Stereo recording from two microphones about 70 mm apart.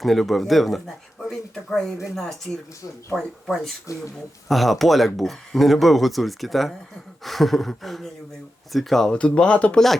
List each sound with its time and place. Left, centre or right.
0.0 s speech: centre
3.4 s speech: centre
3.9 s speech: left
4.4 s speech: centre